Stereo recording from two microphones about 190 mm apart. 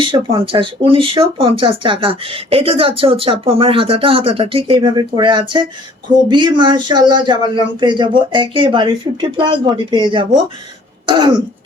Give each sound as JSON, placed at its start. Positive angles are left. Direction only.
{"t": 0.0, "sound": "speech", "side_deg": -25}
{"t": 11.0, "sound": "throat clearing", "side_deg": -25}